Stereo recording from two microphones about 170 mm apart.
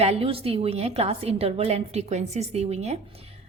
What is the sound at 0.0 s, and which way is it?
A woman's voice, 35° right (ahead or behind).